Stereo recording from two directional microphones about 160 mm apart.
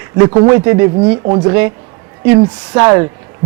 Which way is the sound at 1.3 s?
25° right (ahead or behind).